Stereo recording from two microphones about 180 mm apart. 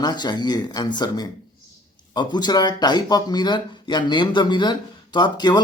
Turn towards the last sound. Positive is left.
turn(degrees=25)  # may be behind; listen again after turning